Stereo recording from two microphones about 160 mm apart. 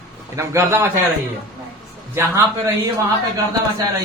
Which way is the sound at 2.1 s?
20° right (ahead or behind).